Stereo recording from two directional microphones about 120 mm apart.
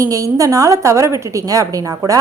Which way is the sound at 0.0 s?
25° right (ahead or behind).